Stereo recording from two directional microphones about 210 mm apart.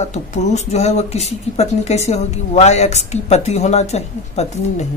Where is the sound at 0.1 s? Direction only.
35° left (ahead or behind).